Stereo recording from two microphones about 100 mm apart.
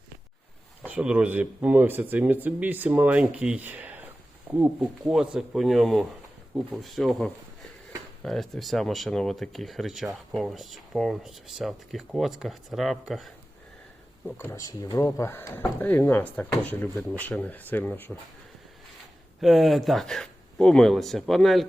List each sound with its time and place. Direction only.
0.9 s speech: 15° right (ahead or behind)
5.0 s speech: 5° right (ahead or behind)
14.3 s speech: 20° left (ahead or behind)
14.6 s speech: 40° left (ahead or behind); by 18.2 s 20° left (ahead or behind)
19.4 s speech: centre (ahead or behind)